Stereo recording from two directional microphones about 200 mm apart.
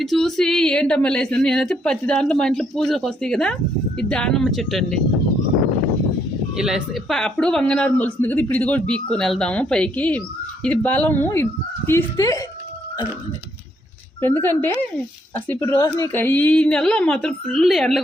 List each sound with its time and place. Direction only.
0.0 s a woman's voice: centre (ahead or behind)
6.6 s a woman's voice: 5° right (ahead or behind); by 12.4 s 15° left (ahead or behind)
14.2 s a woman's voice: 10° left (ahead or behind)